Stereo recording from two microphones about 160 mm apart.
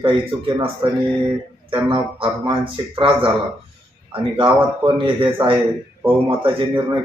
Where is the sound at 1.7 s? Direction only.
35° right (ahead or behind).